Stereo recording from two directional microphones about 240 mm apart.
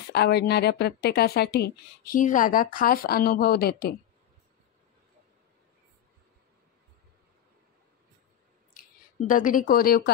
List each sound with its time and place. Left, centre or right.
0.1 s a woman's voice: left
9.3 s a woman's voice: left